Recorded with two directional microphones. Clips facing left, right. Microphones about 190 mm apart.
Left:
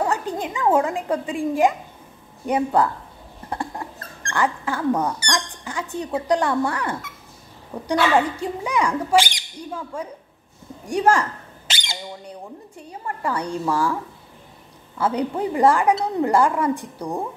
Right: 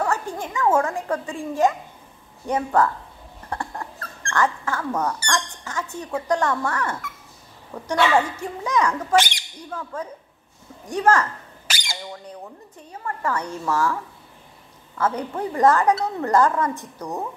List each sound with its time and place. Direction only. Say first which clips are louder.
0.0 s a woman's voice: left 2 dB; 20° left (ahead or behind)
11.6 s squawk: left 1 dB; 25° left (ahead or behind)
12.7 s speech: even; 15° left (ahead or behind)
15.0 s speech: left 2 dB; 15° left (ahead or behind)